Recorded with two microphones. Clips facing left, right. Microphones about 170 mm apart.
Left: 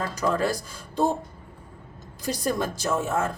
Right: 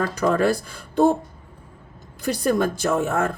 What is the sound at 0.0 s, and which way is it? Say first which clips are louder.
Speech: right 5 dB; 60° right (ahead or behind).